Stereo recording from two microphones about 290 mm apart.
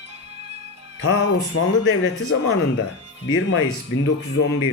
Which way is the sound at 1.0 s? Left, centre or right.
Left.